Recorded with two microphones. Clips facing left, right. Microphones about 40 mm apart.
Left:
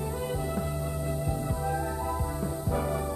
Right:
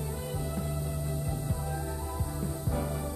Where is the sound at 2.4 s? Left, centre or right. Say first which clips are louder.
Left 2 dB; centre.